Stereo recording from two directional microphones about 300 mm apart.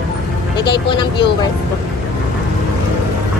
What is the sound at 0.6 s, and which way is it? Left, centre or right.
Speech, centre.